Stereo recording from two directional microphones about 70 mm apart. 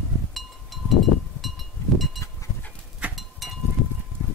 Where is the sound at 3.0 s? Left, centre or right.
Right.